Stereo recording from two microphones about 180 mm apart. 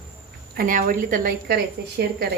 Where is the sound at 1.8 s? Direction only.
65° right (ahead or behind).